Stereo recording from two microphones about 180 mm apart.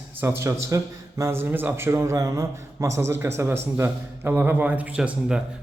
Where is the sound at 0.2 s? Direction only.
15° right (ahead or behind).